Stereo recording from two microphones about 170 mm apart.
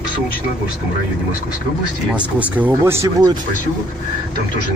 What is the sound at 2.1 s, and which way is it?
Speech, 5° right (ahead or behind).